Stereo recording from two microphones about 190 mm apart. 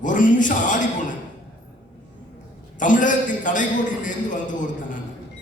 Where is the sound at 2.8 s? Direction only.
45° left (ahead or behind).